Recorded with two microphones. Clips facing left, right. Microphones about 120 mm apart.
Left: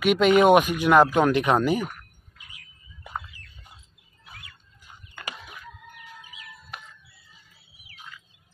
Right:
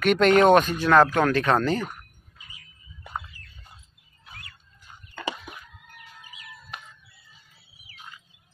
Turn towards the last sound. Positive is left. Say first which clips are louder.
# even
turn(degrees=5)  # may be behind; listen again after turning